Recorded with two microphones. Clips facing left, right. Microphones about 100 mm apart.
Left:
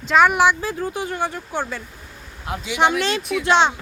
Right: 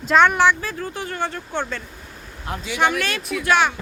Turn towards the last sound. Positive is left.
turn(degrees=25)  # may be behind; listen again after turning